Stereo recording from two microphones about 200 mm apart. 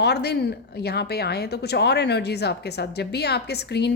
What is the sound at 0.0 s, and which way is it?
A woman's voice, 55° left (ahead or behind).